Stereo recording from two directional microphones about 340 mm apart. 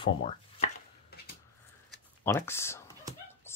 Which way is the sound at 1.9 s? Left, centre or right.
Centre.